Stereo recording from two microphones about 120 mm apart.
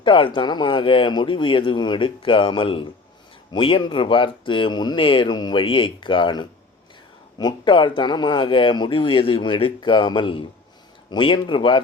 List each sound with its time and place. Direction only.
0.0 s speech: 45° left (ahead or behind)